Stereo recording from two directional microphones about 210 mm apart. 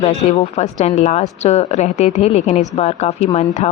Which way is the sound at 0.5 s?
30° left (ahead or behind).